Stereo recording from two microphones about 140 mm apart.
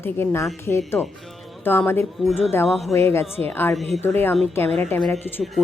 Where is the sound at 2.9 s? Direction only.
20° left (ahead or behind).